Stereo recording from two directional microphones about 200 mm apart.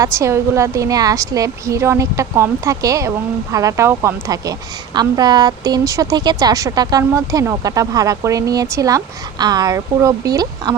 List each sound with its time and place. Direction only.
0.0 s speech: 15° right (ahead or behind)